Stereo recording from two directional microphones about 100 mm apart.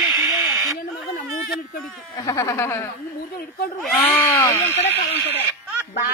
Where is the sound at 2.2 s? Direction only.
30° left (ahead or behind).